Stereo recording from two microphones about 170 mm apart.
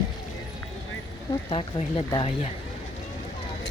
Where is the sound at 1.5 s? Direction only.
35° left (ahead or behind).